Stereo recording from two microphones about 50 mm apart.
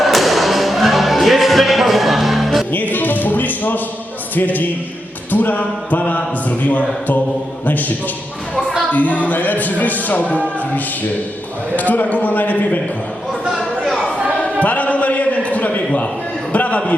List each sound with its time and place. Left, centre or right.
0.0 s music: centre
2.7 s music: left
4.4 s a man's voice: left
11.8 s a man's voice: left
14.6 s a man's voice: left
16.5 s a sound: left